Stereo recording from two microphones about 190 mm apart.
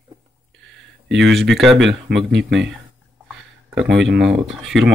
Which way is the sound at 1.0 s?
75° right (ahead or behind).